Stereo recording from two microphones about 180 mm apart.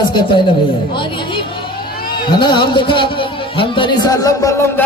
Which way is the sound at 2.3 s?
25° left (ahead or behind).